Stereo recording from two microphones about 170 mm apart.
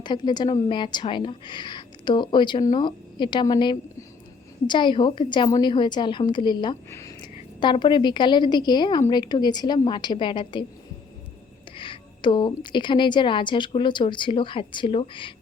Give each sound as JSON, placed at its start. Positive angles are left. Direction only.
{"t": 0.0, "sound": "a woman's voice", "side_deg": 25}
{"t": 11.8, "sound": "a woman's voice", "side_deg": 30}